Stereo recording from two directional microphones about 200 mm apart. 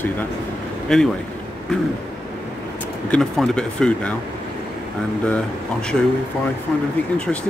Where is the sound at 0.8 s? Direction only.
5° left (ahead or behind).